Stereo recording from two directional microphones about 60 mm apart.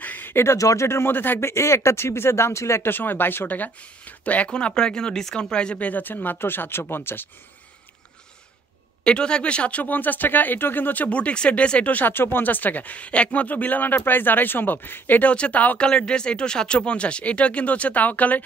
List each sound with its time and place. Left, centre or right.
0.0 s a sound: left
0.6 s speech: left
0.8 s speech: left
1.1 s speech: left
1.5 s speech: left
2.9 s speech: left
9.0 s speech: centre
15.8 s speech: centre